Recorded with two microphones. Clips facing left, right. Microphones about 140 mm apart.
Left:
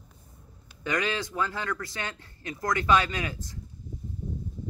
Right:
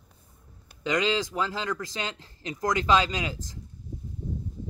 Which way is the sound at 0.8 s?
20° right (ahead or behind).